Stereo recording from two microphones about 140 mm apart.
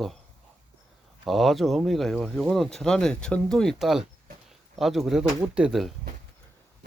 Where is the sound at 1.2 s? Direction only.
Centre (ahead or behind).